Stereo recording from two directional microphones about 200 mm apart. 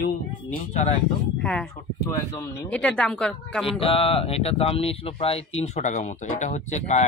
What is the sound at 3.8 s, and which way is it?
Speech, 30° left (ahead or behind).